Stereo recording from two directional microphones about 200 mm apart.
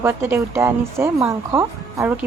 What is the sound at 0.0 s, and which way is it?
Speech, 10° right (ahead or behind).